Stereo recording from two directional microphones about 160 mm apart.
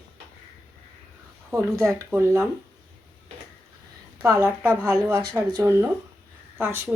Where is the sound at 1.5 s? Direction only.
20° right (ahead or behind).